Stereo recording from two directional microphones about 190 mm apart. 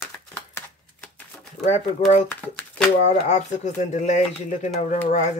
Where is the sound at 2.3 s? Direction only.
10° left (ahead or behind).